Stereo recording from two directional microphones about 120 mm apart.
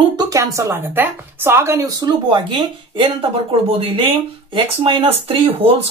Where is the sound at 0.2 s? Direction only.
30° right (ahead or behind).